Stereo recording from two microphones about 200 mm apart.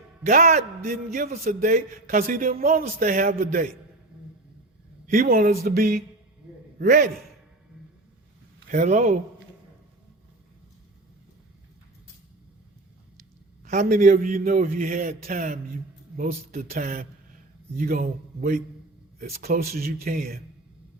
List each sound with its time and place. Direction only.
0.3 s a man's voice: 40° right (ahead or behind)
5.1 s a man's voice: 45° right (ahead or behind)
8.7 s a man's voice: 35° right (ahead or behind)
13.7 s a man's voice: 40° right (ahead or behind)